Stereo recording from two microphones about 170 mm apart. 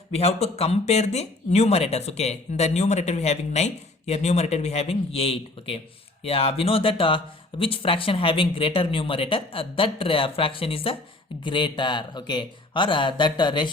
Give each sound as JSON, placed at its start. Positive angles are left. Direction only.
{"t": 0.1, "sound": "speech", "side_deg": 40}